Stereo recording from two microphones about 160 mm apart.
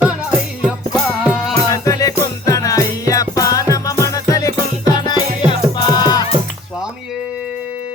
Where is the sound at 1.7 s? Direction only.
20° left (ahead or behind).